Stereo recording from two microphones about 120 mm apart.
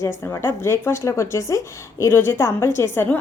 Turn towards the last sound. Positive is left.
turn(degrees=20)  # may be behind; listen again after turning